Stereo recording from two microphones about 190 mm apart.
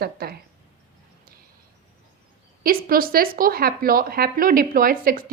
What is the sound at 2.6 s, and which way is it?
A woman's voice, 50° right (ahead or behind).